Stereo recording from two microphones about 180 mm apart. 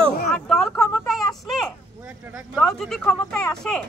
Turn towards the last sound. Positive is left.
turn(degrees=5)  # may be behind; listen again after turning